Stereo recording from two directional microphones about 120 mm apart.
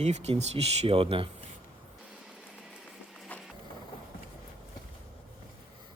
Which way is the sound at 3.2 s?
10° left (ahead or behind).